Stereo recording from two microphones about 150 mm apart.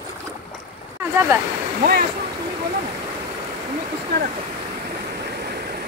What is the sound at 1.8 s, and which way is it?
Speech, 80° right.